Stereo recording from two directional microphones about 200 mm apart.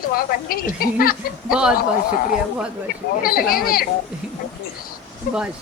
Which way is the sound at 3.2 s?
45° left (ahead or behind).